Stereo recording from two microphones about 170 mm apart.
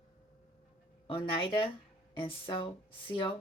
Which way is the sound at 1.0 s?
30° left (ahead or behind).